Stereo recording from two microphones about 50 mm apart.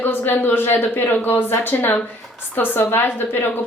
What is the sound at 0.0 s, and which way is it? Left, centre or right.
A woman's voice, left.